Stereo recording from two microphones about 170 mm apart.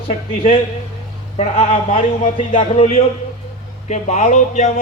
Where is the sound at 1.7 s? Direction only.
50° left (ahead or behind).